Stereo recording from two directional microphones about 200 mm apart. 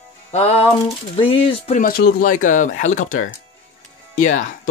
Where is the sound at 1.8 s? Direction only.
50° left (ahead or behind).